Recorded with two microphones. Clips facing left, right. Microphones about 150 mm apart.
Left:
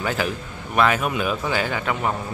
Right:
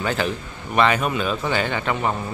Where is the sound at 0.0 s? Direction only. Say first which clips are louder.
Right 1 dB; 5° left (ahead or behind).